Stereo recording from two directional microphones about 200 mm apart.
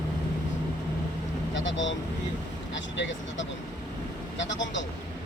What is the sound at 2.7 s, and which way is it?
Speech, 65° left (ahead or behind).